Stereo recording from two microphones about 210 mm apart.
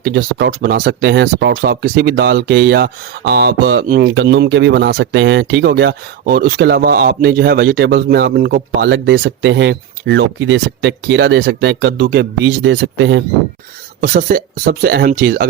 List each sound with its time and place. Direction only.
0.0 s speech: 50° right (ahead or behind)
3.8 s speech: 40° right (ahead or behind)
4.1 s speech: 60° right (ahead or behind)
14.0 s speech: 40° right (ahead or behind)